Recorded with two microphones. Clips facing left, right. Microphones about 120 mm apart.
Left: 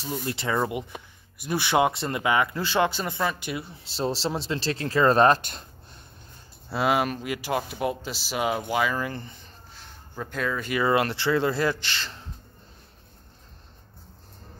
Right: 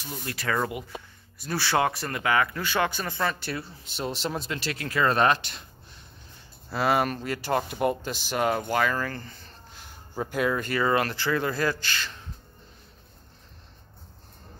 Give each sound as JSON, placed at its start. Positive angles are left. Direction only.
{"t": 0.0, "sound": "speech", "side_deg": 25}
{"t": 3.9, "sound": "speech", "side_deg": 30}
{"t": 6.9, "sound": "speech", "side_deg": 5}
{"t": 9.7, "sound": "a sound", "side_deg": 0}
{"t": 10.2, "sound": "speech", "side_deg": -10}
{"t": 10.7, "sound": "speech", "side_deg": 15}